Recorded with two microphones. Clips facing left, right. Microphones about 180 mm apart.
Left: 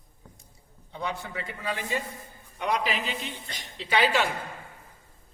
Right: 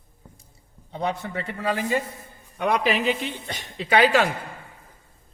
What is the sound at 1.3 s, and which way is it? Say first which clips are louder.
Speech: right 6 dB; 70° right (ahead or behind).